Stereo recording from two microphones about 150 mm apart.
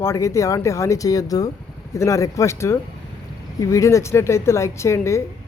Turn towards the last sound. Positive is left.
turn(degrees=20)  # may be behind; listen again after turning